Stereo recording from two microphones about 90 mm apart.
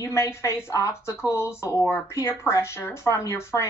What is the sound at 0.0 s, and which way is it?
Speech, 35° left (ahead or behind).